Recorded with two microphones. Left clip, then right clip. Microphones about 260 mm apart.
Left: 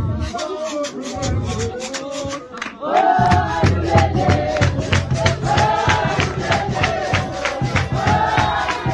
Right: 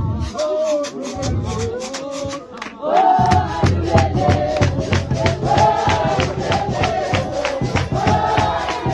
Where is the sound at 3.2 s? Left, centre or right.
Right.